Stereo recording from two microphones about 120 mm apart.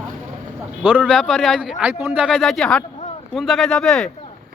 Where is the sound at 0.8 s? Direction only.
10° right (ahead or behind).